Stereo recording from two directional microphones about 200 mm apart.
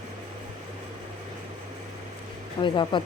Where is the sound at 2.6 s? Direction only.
25° left (ahead or behind).